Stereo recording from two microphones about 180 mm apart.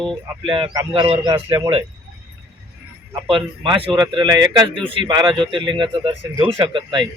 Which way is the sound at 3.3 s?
30° right (ahead or behind).